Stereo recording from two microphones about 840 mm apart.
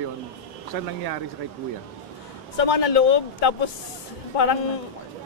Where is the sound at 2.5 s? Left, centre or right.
Left.